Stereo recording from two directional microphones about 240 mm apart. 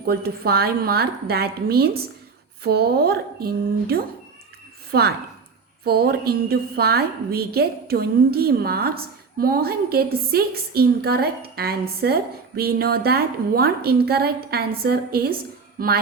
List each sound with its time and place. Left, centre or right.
0.0 s a woman's voice: right
15.8 s music: right